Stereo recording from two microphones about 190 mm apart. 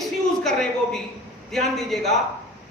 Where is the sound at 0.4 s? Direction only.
Centre (ahead or behind).